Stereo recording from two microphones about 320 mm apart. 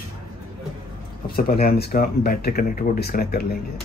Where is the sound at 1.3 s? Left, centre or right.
Left.